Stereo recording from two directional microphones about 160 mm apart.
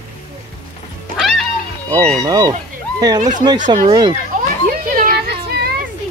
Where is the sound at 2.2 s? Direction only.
25° right (ahead or behind).